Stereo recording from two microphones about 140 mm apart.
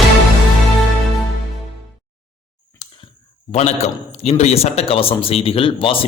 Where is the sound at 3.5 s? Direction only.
50° left (ahead or behind).